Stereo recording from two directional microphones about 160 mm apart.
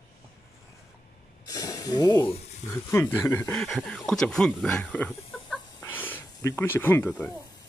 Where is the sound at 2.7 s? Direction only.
15° left (ahead or behind).